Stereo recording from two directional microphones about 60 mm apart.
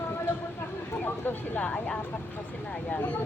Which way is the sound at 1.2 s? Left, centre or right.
Left.